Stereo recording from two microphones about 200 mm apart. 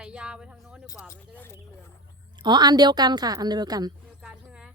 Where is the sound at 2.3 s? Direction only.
20° right (ahead or behind).